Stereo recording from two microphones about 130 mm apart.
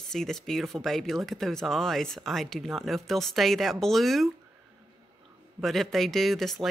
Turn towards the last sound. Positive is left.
turn(degrees=0)  # may be behind; listen again after turning